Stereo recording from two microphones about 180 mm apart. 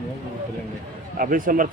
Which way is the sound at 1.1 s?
50° right (ahead or behind).